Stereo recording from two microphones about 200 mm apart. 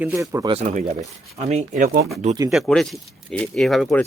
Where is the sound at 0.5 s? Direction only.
35° right (ahead or behind).